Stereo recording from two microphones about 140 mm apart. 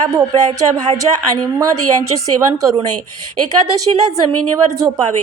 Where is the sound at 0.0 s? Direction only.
25° right (ahead or behind).